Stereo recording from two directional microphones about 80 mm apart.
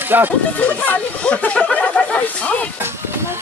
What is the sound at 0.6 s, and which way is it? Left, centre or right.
Speech, centre.